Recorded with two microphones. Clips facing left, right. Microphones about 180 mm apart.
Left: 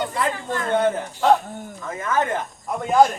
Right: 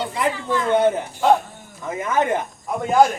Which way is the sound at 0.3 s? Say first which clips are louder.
Right 4 dB; 50° left (ahead or behind).